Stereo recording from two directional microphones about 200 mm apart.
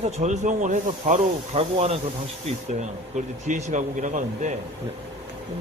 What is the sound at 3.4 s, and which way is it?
Speech, 40° right (ahead or behind).